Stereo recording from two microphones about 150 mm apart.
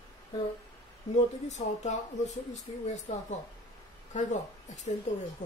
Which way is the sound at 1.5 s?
50° left (ahead or behind).